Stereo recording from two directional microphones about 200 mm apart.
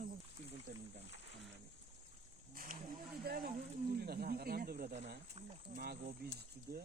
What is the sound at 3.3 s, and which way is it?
Speech, 50° right (ahead or behind).